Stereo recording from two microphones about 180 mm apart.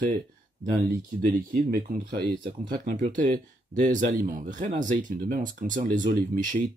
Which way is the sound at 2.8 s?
45° right (ahead or behind).